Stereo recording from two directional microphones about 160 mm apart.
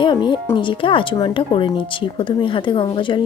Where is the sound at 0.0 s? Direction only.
30° left (ahead or behind).